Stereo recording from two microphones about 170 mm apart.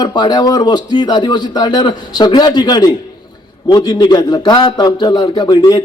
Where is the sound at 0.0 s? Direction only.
25° left (ahead or behind).